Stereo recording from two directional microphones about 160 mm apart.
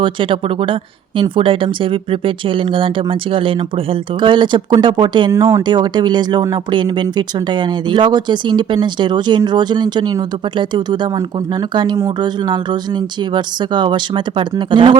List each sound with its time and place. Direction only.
0.0 s speech: 30° right (ahead or behind)
5.3 s speech: 20° right (ahead or behind)